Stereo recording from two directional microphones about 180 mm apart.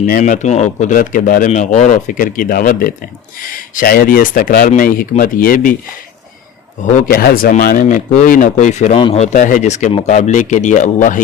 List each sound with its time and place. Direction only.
0.0 s speech: 45° left (ahead or behind)
6.8 s speech: 45° left (ahead or behind)
9.0 s a man's voice: 25° left (ahead or behind)
9.2 s speech: 45° left (ahead or behind)